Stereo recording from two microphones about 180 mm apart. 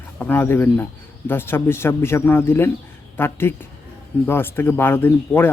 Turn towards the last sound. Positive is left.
turn(degrees=10)  # may be behind; listen again after turning